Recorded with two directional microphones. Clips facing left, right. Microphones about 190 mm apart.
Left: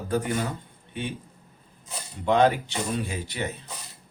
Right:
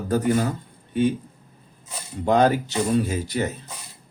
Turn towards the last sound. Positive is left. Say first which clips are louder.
# right 8 dB
turn(degrees=-40)  # may be behind; listen again after turning